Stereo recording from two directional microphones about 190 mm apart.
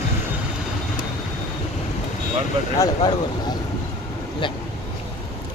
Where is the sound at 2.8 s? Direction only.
20° left (ahead or behind).